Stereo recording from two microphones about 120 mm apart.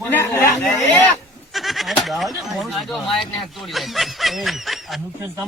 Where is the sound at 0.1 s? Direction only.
20° left (ahead or behind).